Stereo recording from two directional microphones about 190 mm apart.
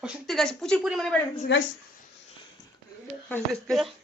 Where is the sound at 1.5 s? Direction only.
70° left (ahead or behind).